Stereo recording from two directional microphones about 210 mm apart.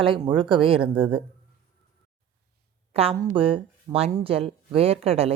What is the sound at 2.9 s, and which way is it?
Speech, 30° right (ahead or behind).